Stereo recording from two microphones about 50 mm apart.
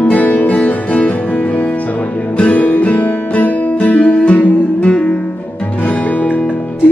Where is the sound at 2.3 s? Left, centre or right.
Left.